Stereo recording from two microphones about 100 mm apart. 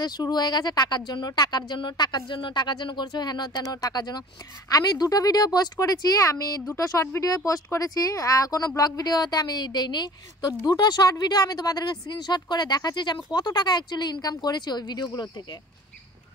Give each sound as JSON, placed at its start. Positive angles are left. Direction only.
{"t": 0.0, "sound": "speech", "side_deg": 45}